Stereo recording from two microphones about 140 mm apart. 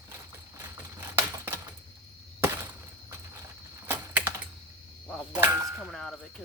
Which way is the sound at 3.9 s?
15° right (ahead or behind).